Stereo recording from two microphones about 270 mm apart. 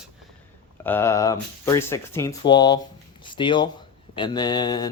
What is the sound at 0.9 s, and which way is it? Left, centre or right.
Speech, centre.